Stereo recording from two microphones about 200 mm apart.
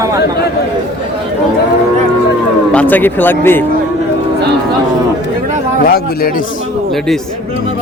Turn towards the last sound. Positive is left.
turn(degrees=50)  # may be behind; listen again after turning